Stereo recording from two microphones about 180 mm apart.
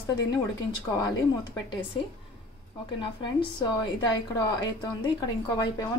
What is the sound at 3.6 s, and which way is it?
Speech, 20° left (ahead or behind).